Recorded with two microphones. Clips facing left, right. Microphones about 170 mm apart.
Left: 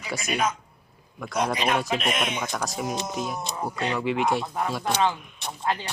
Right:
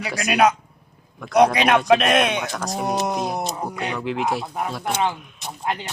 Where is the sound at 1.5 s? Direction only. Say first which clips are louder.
Right 8 dB; 75° right (ahead or behind).